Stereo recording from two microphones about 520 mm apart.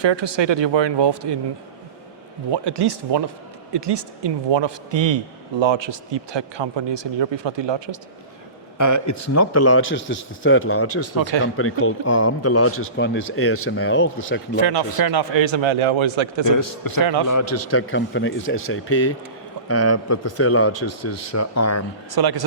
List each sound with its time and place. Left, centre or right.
0.0 s a man's voice: right
2.5 s a man's voice: right
8.8 s speech: left
14.5 s a man's voice: right
16.5 s a man's voice: left
17.0 s a man's voice: right
17.2 s speech: left
22.1 s a man's voice: right